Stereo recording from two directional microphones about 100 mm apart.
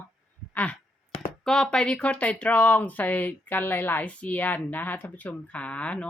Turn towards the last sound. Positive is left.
turn(degrees=15)  # may be behind; listen again after turning